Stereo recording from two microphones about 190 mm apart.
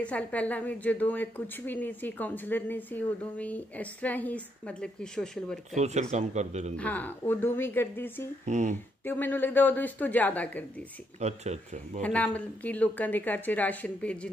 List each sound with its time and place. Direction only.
0.0 s a woman's voice: 5° left (ahead or behind)
5.8 s speech: 35° right (ahead or behind)
6.8 s a woman's voice: 10° left (ahead or behind)
8.5 s speech: 40° right (ahead or behind)
9.0 s a woman's voice: 10° left (ahead or behind)
11.1 s speech: 35° right (ahead or behind)
12.0 s a woman's voice: 5° left (ahead or behind)